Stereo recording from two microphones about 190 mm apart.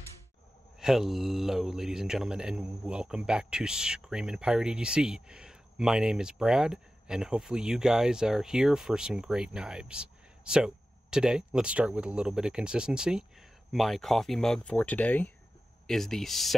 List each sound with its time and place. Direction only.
0.7 s speech: centre (ahead or behind)